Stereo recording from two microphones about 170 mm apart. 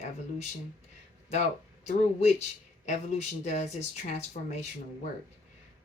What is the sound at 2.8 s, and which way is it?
Speech, 40° left (ahead or behind).